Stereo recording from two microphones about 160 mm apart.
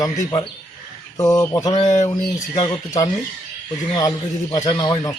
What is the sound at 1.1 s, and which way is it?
A man's voice, 20° left (ahead or behind).